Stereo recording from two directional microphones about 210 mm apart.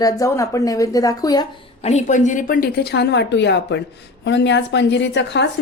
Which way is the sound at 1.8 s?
35° left (ahead or behind).